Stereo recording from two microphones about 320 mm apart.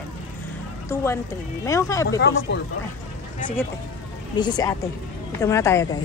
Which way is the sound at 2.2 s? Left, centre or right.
Left.